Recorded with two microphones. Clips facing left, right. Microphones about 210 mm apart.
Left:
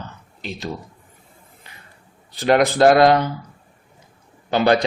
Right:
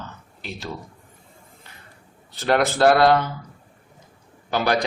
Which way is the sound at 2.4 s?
15° left (ahead or behind).